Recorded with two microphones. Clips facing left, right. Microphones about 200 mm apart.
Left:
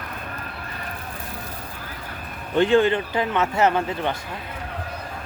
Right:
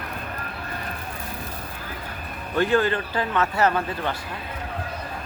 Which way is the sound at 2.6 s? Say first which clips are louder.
Left 4 dB; 25° left (ahead or behind).